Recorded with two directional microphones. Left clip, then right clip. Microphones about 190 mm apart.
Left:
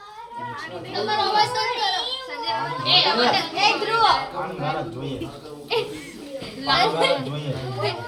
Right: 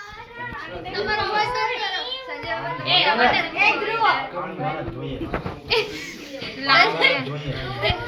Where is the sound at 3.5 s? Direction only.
Centre (ahead or behind).